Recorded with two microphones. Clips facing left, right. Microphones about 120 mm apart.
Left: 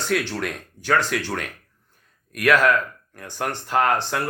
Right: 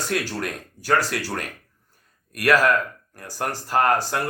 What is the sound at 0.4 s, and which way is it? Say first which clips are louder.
Speech: left 1 dB; 5° right (ahead or behind).